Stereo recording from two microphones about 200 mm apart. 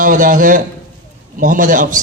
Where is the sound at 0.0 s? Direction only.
40° right (ahead or behind).